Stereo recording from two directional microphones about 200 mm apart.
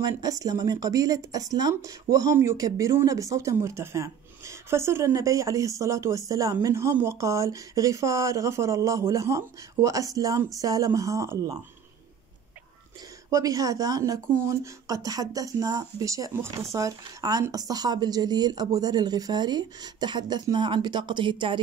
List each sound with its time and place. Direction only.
0.0 s speech: 20° right (ahead or behind)
13.3 s a woman's voice: 15° right (ahead or behind)